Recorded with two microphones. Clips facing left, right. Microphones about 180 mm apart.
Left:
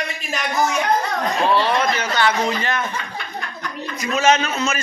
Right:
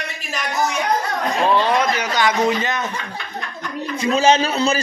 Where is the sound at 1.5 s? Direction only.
15° right (ahead or behind).